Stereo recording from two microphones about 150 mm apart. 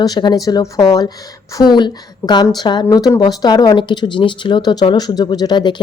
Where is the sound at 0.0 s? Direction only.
30° left (ahead or behind).